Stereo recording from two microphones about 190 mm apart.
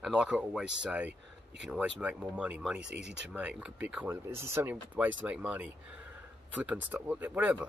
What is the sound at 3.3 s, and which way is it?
Speech, 5° right (ahead or behind).